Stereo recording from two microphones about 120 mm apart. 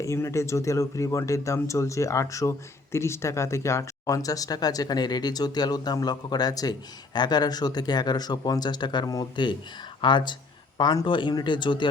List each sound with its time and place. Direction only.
0.0 s speech: 25° left (ahead or behind); by 11.9 s 40° left (ahead or behind)